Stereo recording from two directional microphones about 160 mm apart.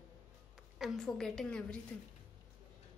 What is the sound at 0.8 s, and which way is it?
A woman's voice, centre (ahead or behind).